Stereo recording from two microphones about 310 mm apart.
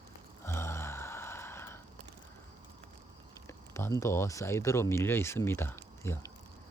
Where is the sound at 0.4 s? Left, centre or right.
Centre.